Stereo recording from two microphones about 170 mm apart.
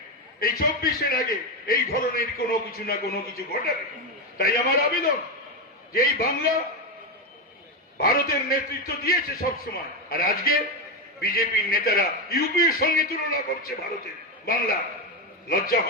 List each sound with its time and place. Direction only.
0.3 s a man's voice: 60° left (ahead or behind)
7.9 s a man's voice: 60° left (ahead or behind)